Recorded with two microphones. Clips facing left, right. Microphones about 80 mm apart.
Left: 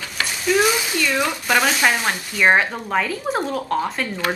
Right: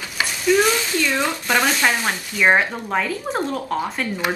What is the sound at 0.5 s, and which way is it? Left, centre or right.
Speech, centre.